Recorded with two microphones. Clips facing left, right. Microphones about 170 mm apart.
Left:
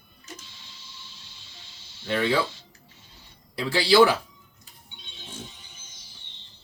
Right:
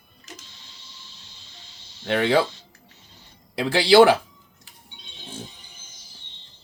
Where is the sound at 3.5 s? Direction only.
70° right (ahead or behind).